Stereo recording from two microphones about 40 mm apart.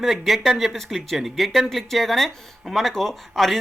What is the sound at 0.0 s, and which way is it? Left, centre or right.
Speech, centre.